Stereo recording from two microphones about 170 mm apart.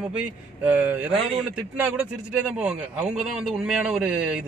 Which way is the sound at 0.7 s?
10° right (ahead or behind).